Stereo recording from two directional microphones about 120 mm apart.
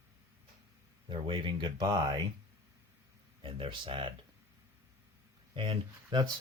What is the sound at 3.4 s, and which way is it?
Speech, 45° right (ahead or behind).